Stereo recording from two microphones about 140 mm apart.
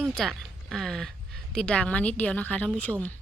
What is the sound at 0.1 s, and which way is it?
A woman's voice, centre (ahead or behind).